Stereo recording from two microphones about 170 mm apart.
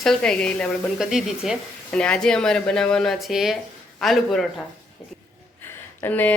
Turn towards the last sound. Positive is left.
turn(degrees=10)  # may be behind; listen again after turning